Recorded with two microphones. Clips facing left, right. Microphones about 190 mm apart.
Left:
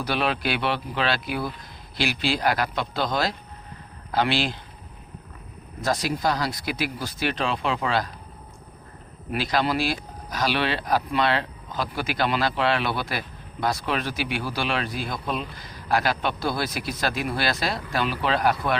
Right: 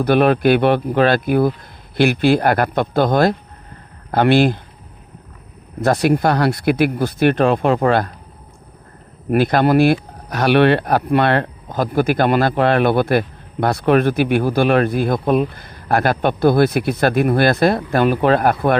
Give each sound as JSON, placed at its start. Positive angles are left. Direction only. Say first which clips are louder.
{"t": 0.0, "sound": "speech", "louder": "right 12 dB", "side_deg": -55}
{"t": 5.8, "sound": "speech", "louder": "right 9 dB", "side_deg": -60}
{"t": 9.3, "sound": "speech", "louder": "right 10 dB", "side_deg": -55}